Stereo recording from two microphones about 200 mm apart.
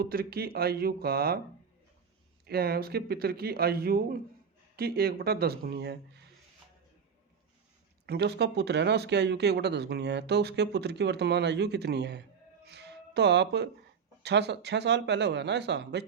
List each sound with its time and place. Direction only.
0.0 s speech: 50° right (ahead or behind)
2.5 s speech: 50° right (ahead or behind)
8.0 s speech: 55° right (ahead or behind)
12.6 s music: 55° right (ahead or behind)
14.2 s speech: 55° right (ahead or behind)